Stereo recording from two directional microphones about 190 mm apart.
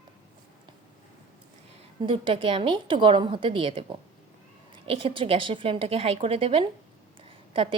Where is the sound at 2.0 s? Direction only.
25° right (ahead or behind).